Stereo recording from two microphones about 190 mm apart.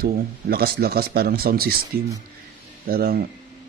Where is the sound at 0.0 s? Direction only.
55° right (ahead or behind).